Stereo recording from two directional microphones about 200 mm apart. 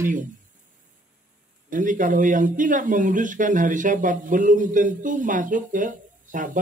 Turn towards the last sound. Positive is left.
turn(degrees=-40)  # may be behind; listen again after turning